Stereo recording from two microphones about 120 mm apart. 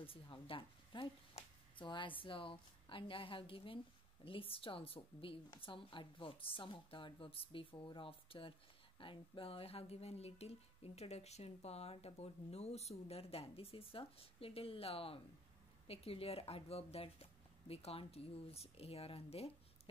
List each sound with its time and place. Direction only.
0.0 s a woman's voice: 50° left (ahead or behind)